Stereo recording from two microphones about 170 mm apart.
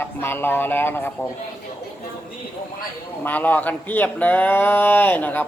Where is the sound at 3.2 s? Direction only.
10° left (ahead or behind).